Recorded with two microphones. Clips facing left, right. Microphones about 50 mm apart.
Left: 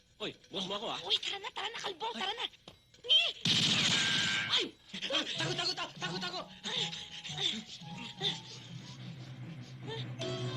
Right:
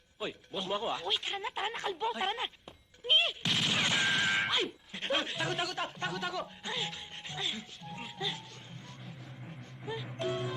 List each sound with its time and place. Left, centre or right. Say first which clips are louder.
0.5 s speech: right 5 dB; centre
1.0 s speech: right 3 dB; right
3.1 s gunshot: right 2 dB; centre
4.4 s speech: right 3 dB; centre
9.8 s music: right 5 dB; right